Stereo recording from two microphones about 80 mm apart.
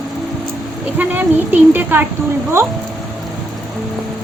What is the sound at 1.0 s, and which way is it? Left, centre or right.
Speech, right.